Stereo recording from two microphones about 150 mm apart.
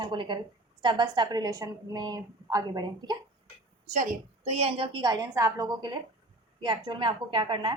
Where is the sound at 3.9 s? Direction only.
50° right (ahead or behind).